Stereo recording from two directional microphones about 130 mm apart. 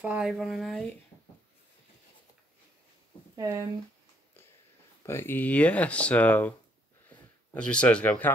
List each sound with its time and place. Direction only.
0.0 s speech: 10° right (ahead or behind)
0.3 s speech: centre (ahead or behind)
3.3 s speech: 20° right (ahead or behind)
5.0 s speech: 20° left (ahead or behind)
7.1 s a sound: 10° left (ahead or behind)